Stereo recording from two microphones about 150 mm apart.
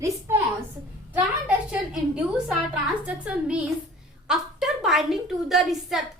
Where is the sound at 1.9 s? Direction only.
5° right (ahead or behind).